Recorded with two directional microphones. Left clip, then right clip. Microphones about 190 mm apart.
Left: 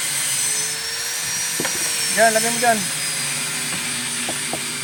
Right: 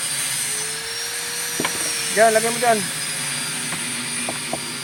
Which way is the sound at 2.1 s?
10° left (ahead or behind).